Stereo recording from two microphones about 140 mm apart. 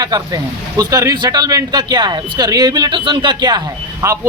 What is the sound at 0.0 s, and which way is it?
A man's voice, 25° right (ahead or behind).